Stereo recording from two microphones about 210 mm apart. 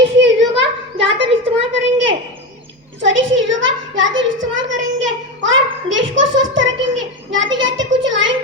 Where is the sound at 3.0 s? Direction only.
65° right (ahead or behind).